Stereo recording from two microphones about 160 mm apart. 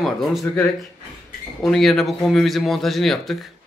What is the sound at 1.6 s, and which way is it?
Speech, centre (ahead or behind).